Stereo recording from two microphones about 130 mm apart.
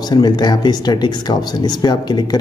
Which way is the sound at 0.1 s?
30° left (ahead or behind).